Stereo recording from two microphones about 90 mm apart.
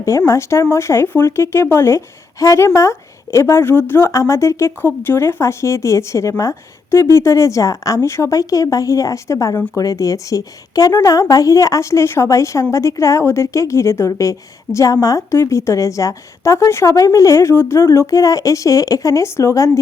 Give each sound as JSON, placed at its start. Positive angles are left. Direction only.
{"t": 0.0, "sound": "speech", "side_deg": 35}